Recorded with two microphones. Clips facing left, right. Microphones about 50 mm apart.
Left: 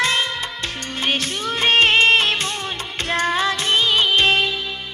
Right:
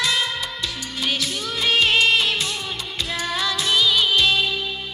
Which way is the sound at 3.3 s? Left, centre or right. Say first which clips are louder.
Left 3 dB; left.